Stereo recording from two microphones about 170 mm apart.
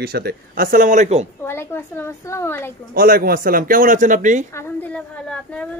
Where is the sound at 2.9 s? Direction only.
60° right (ahead or behind).